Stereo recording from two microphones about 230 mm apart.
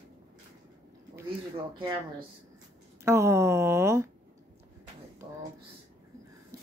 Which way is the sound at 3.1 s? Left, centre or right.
Centre.